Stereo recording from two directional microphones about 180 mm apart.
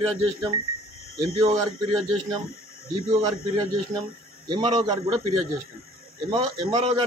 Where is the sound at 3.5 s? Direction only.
25° right (ahead or behind).